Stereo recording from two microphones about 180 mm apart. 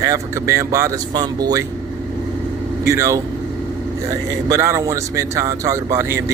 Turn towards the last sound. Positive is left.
turn(degrees=-15)  # may be behind; listen again after turning